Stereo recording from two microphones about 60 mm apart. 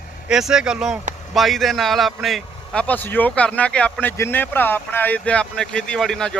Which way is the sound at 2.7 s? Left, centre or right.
Left.